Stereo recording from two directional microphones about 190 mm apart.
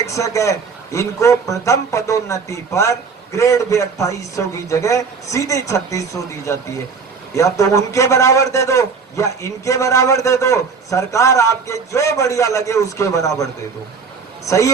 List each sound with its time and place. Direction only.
0.0 s a man's voice: 15° left (ahead or behind)
14.4 s a man's voice: 15° left (ahead or behind)